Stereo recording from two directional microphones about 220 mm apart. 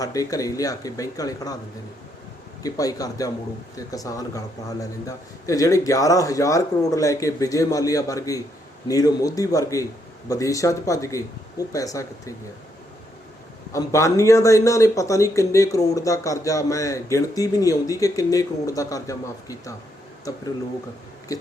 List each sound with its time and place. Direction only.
0.0 s speech: 15° left (ahead or behind)
2.6 s speech: 15° left (ahead or behind)
13.7 s speech: 15° left (ahead or behind)